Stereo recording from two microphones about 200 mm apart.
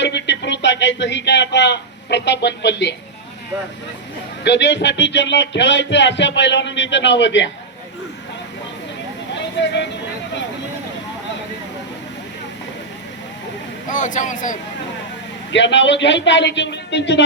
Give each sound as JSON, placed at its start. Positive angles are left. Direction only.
{"t": 0.0, "sound": "a sound", "side_deg": 60}
{"t": 4.4, "sound": "speech", "side_deg": 60}
{"t": 9.3, "sound": "vehicle", "side_deg": 60}
{"t": 13.9, "sound": "speech", "side_deg": 40}
{"t": 15.5, "sound": "speech", "side_deg": 65}